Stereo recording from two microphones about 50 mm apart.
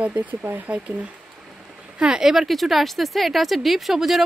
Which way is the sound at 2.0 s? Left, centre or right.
Centre.